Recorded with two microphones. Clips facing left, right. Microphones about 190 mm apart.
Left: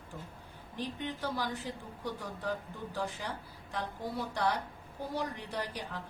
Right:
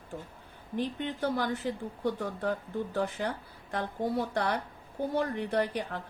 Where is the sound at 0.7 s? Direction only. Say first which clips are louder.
Right 6 dB; 55° right (ahead or behind).